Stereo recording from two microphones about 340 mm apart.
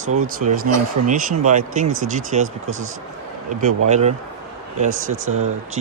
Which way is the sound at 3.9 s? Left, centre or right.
Centre.